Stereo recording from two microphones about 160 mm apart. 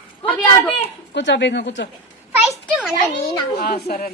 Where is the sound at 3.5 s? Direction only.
65° left (ahead or behind).